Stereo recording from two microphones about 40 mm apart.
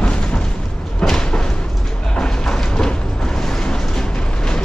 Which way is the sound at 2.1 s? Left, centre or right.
Centre.